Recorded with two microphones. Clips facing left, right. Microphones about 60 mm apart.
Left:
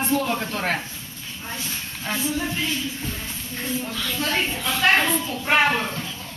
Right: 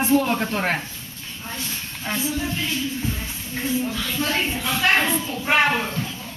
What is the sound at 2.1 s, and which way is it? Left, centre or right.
Speech, centre.